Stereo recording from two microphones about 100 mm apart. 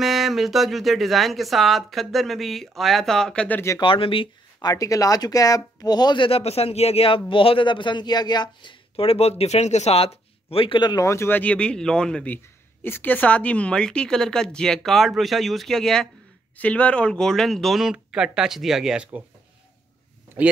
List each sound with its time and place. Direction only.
0.0 s speech: centre (ahead or behind)
3.8 s speech: 65° left (ahead or behind)
4.6 s speech: 40° left (ahead or behind)
8.9 s speech: 75° left (ahead or behind)
9.4 s speech: 90° left; by 11.0 s 55° left (ahead or behind)
11.0 s speech: 30° left (ahead or behind); by 12.4 s 10° left (ahead or behind)
12.8 s speech: 20° left (ahead or behind); by 19.2 s 5° right (ahead or behind)